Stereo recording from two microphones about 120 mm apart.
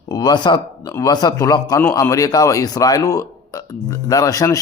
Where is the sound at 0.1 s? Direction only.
35° left (ahead or behind).